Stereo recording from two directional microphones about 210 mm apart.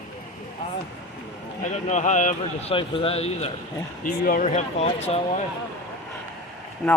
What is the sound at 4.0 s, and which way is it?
A man's voice, 40° left (ahead or behind).